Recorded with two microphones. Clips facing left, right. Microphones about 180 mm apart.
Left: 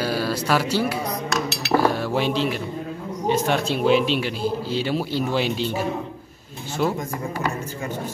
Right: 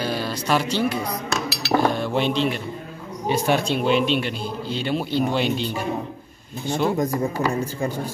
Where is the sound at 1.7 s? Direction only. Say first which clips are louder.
Even; 5° left (ahead or behind).